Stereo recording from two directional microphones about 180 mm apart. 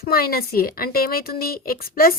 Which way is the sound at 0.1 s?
55° left (ahead or behind).